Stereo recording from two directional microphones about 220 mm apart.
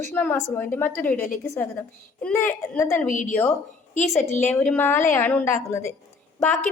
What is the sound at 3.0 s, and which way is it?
A woman's voice, 35° left (ahead or behind).